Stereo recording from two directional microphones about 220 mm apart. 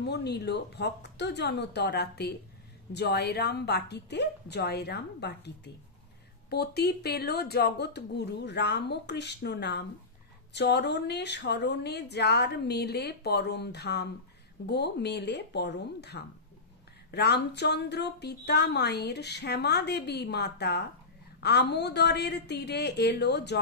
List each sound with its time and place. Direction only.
0.0 s a woman's voice: 50° left (ahead or behind)